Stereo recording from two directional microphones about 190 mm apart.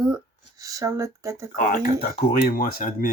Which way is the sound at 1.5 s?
45° left (ahead or behind).